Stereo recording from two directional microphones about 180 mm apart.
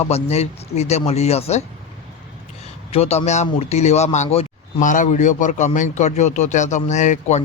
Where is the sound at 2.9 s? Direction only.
35° left (ahead or behind).